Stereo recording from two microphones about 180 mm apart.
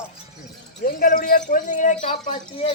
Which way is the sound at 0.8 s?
50° left (ahead or behind).